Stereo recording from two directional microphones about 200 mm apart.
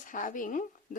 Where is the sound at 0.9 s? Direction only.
40° left (ahead or behind).